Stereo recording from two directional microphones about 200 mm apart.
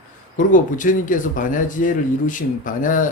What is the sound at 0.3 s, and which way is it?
Speech, 40° left (ahead or behind).